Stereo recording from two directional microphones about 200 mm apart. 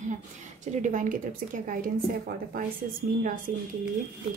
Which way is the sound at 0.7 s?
40° right (ahead or behind).